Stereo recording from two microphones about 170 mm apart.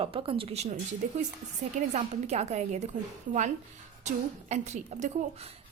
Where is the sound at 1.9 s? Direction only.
40° right (ahead or behind).